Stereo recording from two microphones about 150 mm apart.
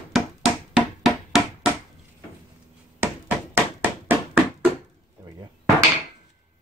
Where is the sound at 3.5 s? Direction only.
15° right (ahead or behind).